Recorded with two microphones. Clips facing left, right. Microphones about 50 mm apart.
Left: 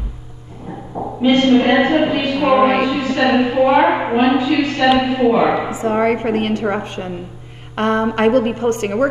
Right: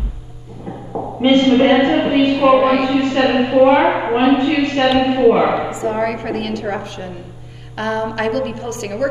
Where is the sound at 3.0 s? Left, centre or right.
Right.